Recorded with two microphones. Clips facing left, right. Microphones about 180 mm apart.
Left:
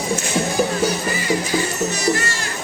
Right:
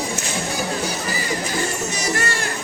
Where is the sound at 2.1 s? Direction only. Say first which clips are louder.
Right 1 dB; 60° right (ahead or behind).